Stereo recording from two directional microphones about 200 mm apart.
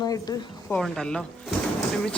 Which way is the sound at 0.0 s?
20° left (ahead or behind).